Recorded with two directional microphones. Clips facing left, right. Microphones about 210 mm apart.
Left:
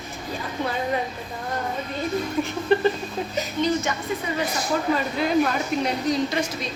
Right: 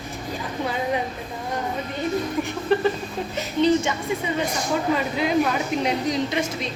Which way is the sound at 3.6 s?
30° right (ahead or behind).